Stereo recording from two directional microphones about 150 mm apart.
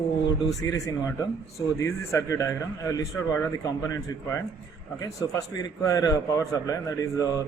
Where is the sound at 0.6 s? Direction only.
20° left (ahead or behind).